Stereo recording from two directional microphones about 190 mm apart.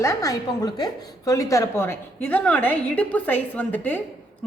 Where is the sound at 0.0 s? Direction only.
15° left (ahead or behind).